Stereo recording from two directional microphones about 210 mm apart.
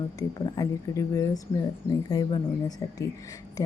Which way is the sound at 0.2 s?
20° left (ahead or behind).